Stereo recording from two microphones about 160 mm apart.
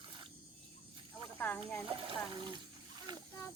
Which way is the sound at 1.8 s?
30° right (ahead or behind).